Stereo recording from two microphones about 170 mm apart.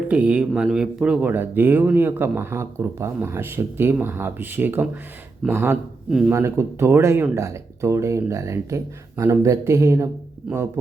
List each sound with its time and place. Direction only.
0.1 s speech: 5° right (ahead or behind)
6.3 s speech: 15° right (ahead or behind)